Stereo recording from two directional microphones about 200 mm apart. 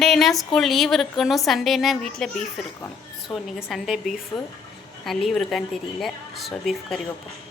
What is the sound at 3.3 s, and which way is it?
Speech, centre (ahead or behind).